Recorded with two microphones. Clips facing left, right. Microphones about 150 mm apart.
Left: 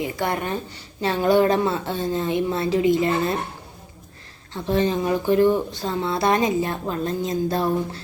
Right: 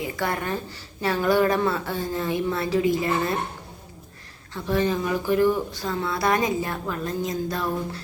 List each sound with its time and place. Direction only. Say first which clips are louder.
0.0 s a woman's voice: left 2 dB; 20° left (ahead or behind)
4.5 s a woman's voice: left 2 dB; 25° left (ahead or behind)